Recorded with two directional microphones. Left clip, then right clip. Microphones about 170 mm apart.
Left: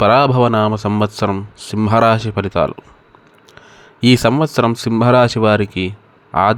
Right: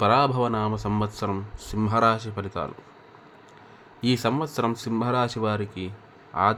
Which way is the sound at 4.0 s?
45° left (ahead or behind).